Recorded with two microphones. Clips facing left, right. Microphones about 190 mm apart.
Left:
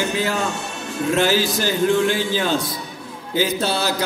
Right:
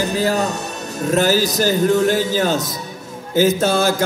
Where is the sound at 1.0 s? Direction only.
40° right (ahead or behind).